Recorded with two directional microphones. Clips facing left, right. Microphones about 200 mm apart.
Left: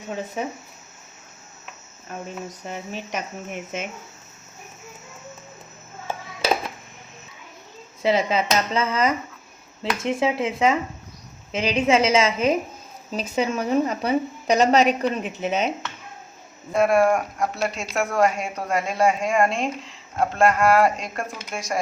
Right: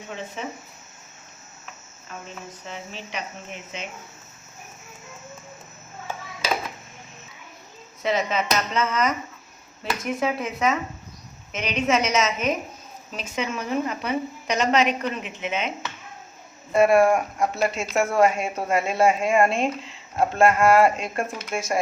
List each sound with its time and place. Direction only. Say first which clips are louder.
2.6 s speech: left 3 dB; 45° left (ahead or behind)
8.0 s a woman's voice: left 3 dB; 30° left (ahead or behind)
16.7 s speech: right 1 dB; centre (ahead or behind)